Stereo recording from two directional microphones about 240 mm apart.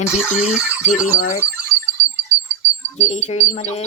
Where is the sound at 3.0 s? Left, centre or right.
Left.